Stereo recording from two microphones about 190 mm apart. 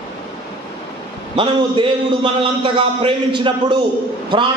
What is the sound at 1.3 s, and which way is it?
A man's voice, 25° right (ahead or behind).